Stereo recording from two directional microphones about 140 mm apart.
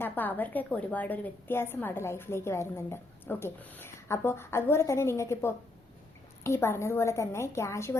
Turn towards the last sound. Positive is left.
turn(degrees=20)  # may be behind; listen again after turning